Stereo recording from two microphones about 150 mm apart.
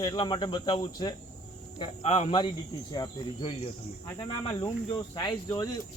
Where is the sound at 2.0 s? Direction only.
45° left (ahead or behind); by 5.8 s 25° left (ahead or behind).